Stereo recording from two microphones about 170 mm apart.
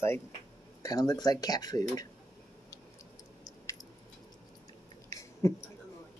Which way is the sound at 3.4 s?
20° left (ahead or behind).